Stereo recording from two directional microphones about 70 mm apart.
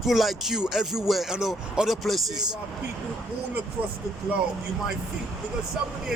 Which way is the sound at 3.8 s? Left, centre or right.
Right.